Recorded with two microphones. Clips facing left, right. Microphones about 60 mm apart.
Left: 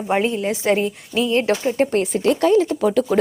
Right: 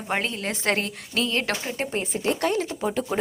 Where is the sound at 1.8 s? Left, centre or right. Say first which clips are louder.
Left 11 dB; left.